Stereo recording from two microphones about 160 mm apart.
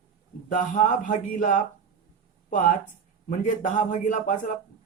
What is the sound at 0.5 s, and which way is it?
Speech, 50° left (ahead or behind).